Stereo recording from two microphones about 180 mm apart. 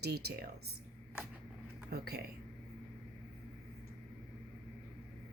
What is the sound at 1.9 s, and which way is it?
Speech, 60° right (ahead or behind).